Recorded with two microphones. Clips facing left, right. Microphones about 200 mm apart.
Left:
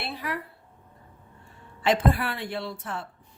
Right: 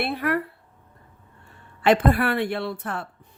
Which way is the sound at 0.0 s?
60° right (ahead or behind).